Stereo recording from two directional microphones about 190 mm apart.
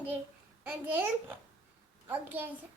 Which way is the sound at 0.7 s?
10° right (ahead or behind).